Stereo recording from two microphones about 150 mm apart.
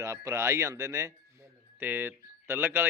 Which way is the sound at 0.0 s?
20° right (ahead or behind).